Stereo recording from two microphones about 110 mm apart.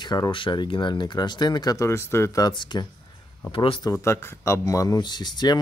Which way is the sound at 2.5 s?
45° left (ahead or behind).